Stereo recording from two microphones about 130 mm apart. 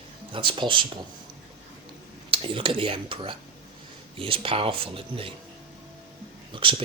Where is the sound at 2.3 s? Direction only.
40° right (ahead or behind).